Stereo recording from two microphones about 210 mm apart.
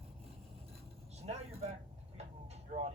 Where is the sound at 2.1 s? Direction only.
30° right (ahead or behind).